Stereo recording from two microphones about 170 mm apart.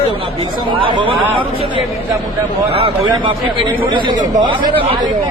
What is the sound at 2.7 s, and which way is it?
Speech, 30° right (ahead or behind).